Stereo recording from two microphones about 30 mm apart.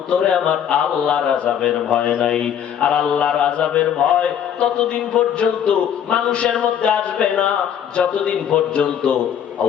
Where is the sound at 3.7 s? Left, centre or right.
Left.